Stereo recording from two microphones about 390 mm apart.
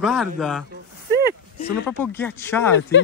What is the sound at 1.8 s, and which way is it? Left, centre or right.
Speech, centre.